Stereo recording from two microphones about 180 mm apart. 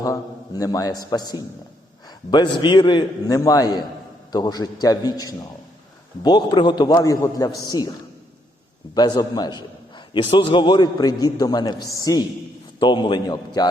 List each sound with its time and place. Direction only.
0.0 s a man's voice: 20° left (ahead or behind)
9.0 s a man's voice: 20° left (ahead or behind)